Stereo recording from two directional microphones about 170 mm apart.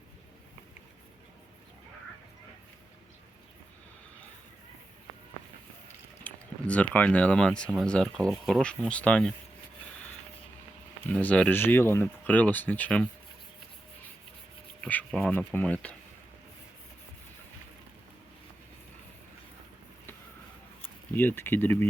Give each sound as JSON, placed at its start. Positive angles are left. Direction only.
{"t": 6.2, "sound": "speech", "side_deg": 10}
{"t": 11.0, "sound": "speech", "side_deg": 10}
{"t": 14.8, "sound": "speech", "side_deg": 10}
{"t": 21.2, "sound": "speech", "side_deg": 10}